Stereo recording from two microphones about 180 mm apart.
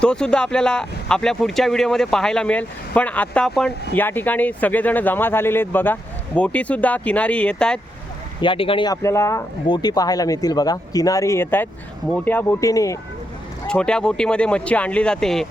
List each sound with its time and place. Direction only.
0.0 s speech: 5° left (ahead or behind)
8.4 s speech: 30° left (ahead or behind)
13.7 s speech: 5° left (ahead or behind)